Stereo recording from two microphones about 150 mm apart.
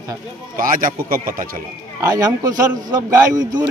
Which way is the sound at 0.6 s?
65° right (ahead or behind).